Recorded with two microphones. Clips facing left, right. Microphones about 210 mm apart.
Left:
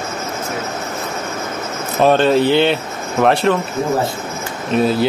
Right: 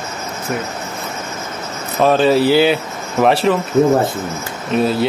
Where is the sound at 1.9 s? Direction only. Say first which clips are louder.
Even; centre (ahead or behind).